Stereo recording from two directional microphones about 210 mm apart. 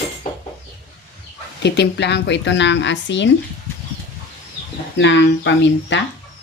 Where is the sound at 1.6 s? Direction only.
55° left (ahead or behind).